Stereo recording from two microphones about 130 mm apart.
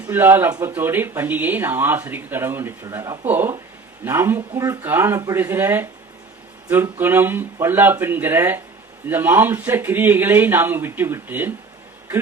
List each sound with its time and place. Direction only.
0.1 s speech: 15° right (ahead or behind)
7.0 s speech: 15° right (ahead or behind)